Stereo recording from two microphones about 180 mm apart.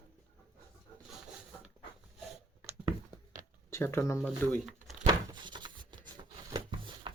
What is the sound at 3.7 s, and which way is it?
Speech, 15° left (ahead or behind).